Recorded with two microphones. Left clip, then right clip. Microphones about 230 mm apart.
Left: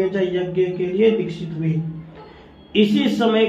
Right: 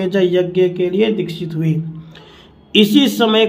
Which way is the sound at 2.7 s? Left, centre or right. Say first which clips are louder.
Right 6 dB; right.